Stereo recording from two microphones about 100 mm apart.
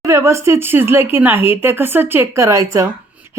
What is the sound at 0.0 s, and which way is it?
Speech, 30° right (ahead or behind).